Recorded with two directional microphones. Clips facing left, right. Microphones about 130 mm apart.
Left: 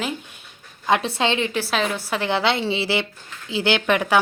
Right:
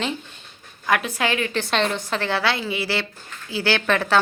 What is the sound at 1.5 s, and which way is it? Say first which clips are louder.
A woman's voice: right 1 dB; 5° left (ahead or behind).